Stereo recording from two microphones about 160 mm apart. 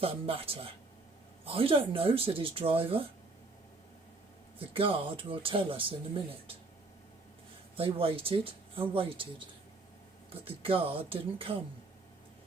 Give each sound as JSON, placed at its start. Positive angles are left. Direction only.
{"t": 0.0, "sound": "speech", "side_deg": -35}
{"t": 4.7, "sound": "speech", "side_deg": -35}
{"t": 7.8, "sound": "speech", "side_deg": -35}
{"t": 10.4, "sound": "speech", "side_deg": -35}